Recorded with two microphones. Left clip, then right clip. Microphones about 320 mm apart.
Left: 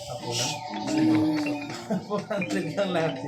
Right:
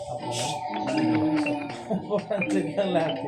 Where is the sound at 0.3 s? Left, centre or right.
Centre.